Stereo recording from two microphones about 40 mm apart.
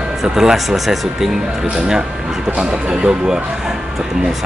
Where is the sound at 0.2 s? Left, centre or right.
Centre.